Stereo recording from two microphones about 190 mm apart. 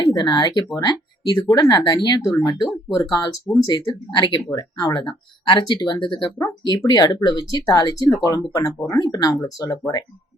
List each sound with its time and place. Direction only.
0.0 s speech: 20° left (ahead or behind)